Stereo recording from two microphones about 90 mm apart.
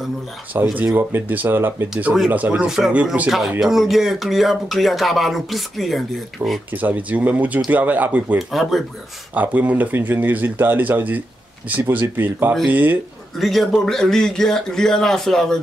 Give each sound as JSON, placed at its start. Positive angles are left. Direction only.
{"t": 0.8, "sound": "speech", "side_deg": -25}
{"t": 6.7, "sound": "speech", "side_deg": -20}
{"t": 8.4, "sound": "speech", "side_deg": 0}
{"t": 9.3, "sound": "speech", "side_deg": -20}
{"t": 13.4, "sound": "speech", "side_deg": 0}